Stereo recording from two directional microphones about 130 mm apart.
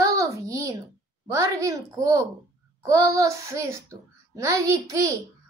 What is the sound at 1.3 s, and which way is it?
A child's voice, 25° right (ahead or behind).